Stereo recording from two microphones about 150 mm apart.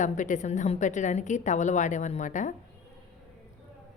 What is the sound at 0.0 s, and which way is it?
A woman's voice, 55° left (ahead or behind).